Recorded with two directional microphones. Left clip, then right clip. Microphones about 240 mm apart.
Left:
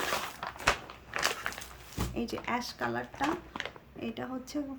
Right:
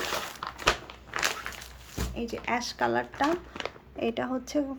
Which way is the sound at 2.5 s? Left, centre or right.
Centre.